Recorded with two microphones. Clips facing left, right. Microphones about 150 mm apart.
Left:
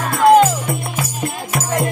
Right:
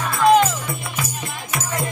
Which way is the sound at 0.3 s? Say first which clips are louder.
Left 5 dB; 45° left (ahead or behind).